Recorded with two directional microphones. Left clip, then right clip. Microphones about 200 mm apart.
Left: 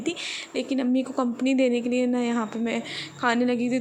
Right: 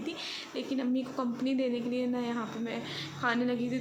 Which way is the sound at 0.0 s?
35° left (ahead or behind).